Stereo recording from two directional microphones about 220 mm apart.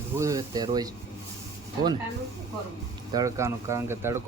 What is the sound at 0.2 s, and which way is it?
Speech, 15° right (ahead or behind).